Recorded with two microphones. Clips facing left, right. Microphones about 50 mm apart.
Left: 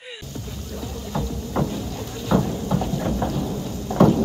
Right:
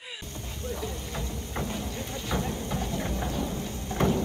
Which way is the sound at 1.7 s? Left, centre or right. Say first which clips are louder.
Left 4 dB; right.